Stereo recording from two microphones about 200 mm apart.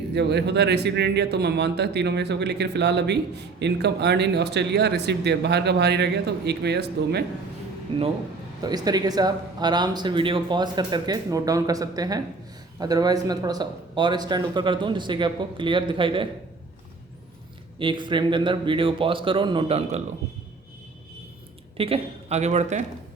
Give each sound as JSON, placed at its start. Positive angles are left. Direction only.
{"t": 0.1, "sound": "speech", "side_deg": -55}
{"t": 8.6, "sound": "speech", "side_deg": -20}
{"t": 17.7, "sound": "speech", "side_deg": -25}
{"t": 21.8, "sound": "a man's voice", "side_deg": -30}